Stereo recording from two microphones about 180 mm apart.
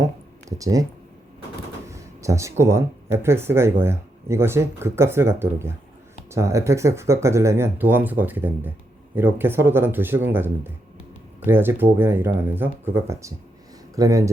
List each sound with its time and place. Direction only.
0.4 s speech: 20° right (ahead or behind)
1.9 s speech: 15° right (ahead or behind)